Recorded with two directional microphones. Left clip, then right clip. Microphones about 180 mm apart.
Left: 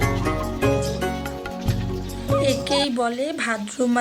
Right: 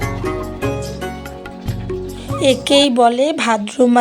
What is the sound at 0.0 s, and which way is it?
Music, centre (ahead or behind).